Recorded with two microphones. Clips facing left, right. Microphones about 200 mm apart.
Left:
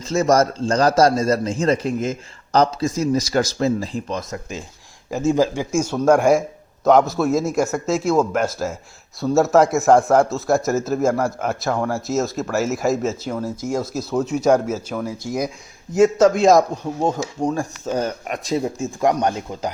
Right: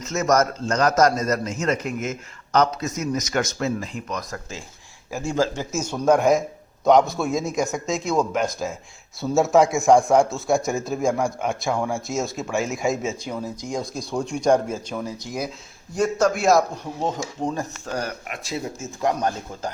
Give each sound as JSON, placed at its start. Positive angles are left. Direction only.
{"t": 0.0, "sound": "a man's voice", "side_deg": 30}
{"t": 15.9, "sound": "a man's voice", "side_deg": 25}
{"t": 17.2, "sound": "speech", "side_deg": 0}
{"t": 17.6, "sound": "speech", "side_deg": 20}
{"t": 18.3, "sound": "a man's voice", "side_deg": 35}